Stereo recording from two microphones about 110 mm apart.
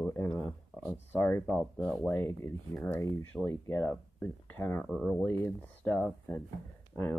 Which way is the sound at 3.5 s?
20° left (ahead or behind).